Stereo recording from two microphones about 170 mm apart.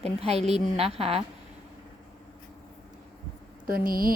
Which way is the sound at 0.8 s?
35° right (ahead or behind).